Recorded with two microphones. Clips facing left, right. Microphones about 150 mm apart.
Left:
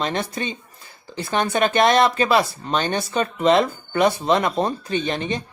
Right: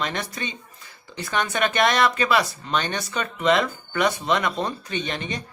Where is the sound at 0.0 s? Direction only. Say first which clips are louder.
Left 4 dB; 30° left (ahead or behind).